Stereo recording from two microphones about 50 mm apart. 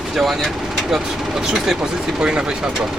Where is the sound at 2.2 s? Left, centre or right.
Centre.